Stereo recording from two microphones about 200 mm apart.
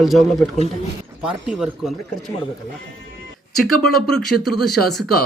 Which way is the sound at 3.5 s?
Centre (ahead or behind).